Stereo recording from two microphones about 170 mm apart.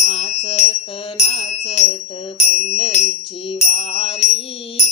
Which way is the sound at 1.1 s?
35° left (ahead or behind).